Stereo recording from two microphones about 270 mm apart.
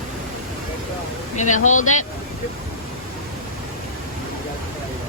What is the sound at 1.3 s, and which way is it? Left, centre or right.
Speech, left.